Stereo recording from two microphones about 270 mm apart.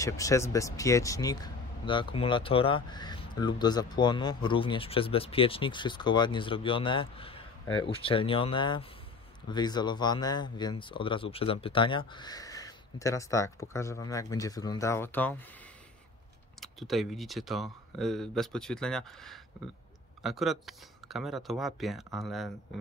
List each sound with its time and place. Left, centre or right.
0.0 s speech: centre
16.5 s speech: centre